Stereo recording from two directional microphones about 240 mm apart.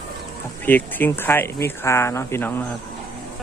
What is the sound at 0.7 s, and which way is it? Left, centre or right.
Speech, centre.